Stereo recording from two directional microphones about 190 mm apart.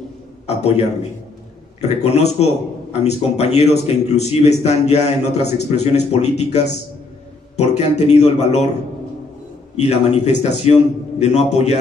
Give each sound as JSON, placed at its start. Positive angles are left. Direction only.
{"t": 0.5, "sound": "a man's voice", "side_deg": 35}
{"t": 9.8, "sound": "a man's voice", "side_deg": 35}